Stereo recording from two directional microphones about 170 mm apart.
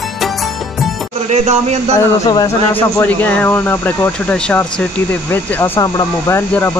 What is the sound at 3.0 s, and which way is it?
Speech, 10° left (ahead or behind).